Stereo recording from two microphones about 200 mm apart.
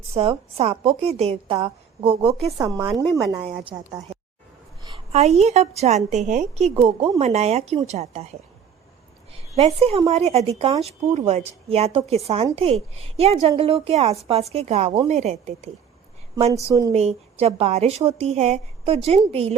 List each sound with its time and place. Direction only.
0.1 s a woman's voice: 30° right (ahead or behind)
2.6 s a woman's voice: 15° right (ahead or behind); by 8.3 s 30° right (ahead or behind)
9.6 s a woman's voice: 30° right (ahead or behind)
16.9 s a woman's voice: 35° right (ahead or behind)